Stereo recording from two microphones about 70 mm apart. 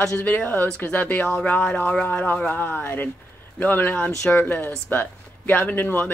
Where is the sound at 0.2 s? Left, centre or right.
Left.